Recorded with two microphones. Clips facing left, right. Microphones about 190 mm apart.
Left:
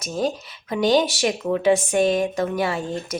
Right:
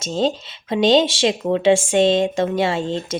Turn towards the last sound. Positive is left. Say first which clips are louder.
# right 4 dB
turn(degrees=-25)  # may be behind; listen again after turning